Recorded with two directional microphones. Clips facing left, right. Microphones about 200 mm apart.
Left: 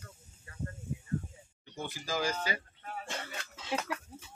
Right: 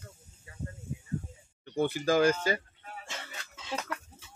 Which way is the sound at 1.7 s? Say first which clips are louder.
Right 10 dB; 60° right (ahead or behind).